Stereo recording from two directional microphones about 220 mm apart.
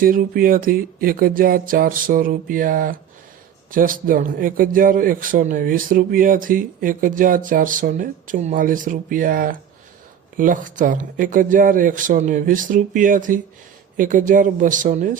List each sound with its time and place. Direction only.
0.0 s a man's voice: 40° right (ahead or behind)